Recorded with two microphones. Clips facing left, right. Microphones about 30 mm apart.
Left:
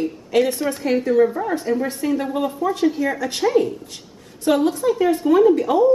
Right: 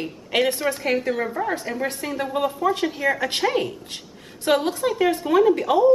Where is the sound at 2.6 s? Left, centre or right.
Right.